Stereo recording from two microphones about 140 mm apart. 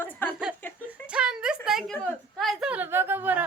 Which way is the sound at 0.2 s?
15° left (ahead or behind).